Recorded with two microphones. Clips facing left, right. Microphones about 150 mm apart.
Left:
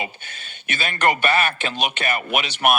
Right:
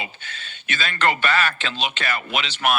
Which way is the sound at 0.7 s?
15° left (ahead or behind).